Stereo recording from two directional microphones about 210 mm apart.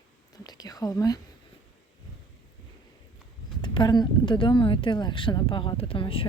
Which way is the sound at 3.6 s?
20° left (ahead or behind).